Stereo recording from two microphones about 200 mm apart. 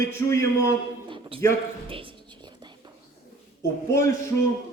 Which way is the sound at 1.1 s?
25° right (ahead or behind).